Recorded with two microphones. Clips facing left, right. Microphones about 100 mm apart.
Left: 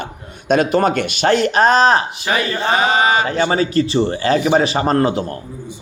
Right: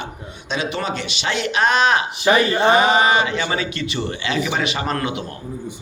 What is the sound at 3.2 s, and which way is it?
Speech, 45° left (ahead or behind).